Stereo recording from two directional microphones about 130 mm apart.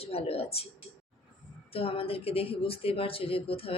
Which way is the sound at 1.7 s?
45° left (ahead or behind).